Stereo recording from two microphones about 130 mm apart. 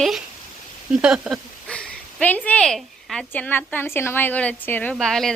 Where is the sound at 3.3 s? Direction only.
15° left (ahead or behind).